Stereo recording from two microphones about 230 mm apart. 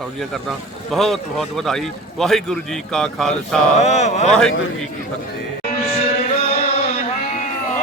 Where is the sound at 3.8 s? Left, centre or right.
Left.